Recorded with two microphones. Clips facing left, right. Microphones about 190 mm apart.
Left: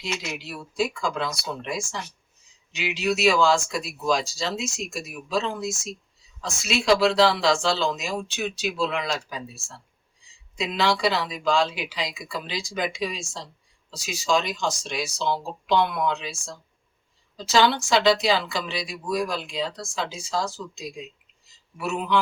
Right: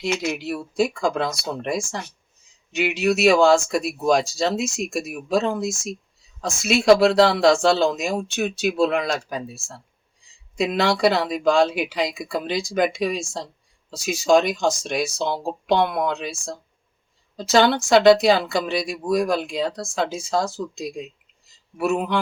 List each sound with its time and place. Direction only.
0.0 s speech: 55° right (ahead or behind)
10.6 s speech: 55° right (ahead or behind)
17.3 s speech: 55° right (ahead or behind)